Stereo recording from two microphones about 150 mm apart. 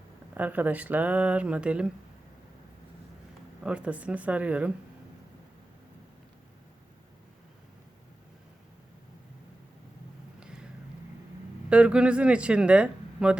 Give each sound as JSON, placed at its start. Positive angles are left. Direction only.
{"t": 0.3, "sound": "speech", "side_deg": -10}
{"t": 3.6, "sound": "speech", "side_deg": -5}
{"t": 10.4, "sound": "a sound", "side_deg": -5}
{"t": 11.7, "sound": "speech", "side_deg": -5}